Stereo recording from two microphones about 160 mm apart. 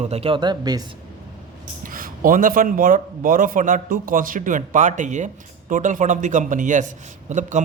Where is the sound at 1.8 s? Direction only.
60° right (ahead or behind).